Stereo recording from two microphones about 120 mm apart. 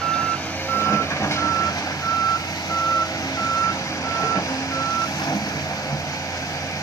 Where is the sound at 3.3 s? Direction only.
30° left (ahead or behind).